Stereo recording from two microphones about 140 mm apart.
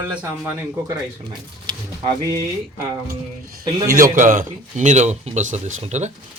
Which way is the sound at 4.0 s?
75° right (ahead or behind).